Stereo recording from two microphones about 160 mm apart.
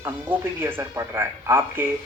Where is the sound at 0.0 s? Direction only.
15° right (ahead or behind).